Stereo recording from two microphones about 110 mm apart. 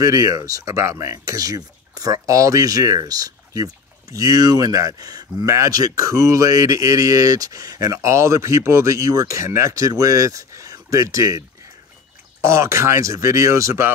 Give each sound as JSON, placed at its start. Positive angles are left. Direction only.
{"t": 0.0, "sound": "speech", "side_deg": -30}